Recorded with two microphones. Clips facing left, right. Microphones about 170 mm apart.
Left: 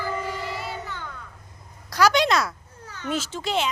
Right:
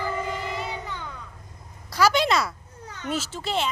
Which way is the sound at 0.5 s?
15° right (ahead or behind).